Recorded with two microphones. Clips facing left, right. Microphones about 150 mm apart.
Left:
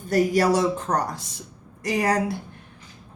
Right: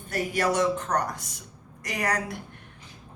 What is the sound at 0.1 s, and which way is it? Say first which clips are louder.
A woman's voice: left 7 dB; 35° left (ahead or behind).